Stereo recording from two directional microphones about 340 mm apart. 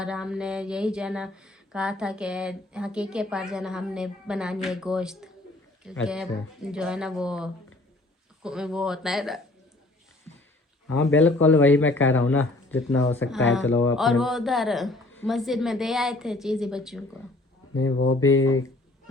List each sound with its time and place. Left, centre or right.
0.0 s speech: centre
11.2 s speech: centre
17.7 s speech: left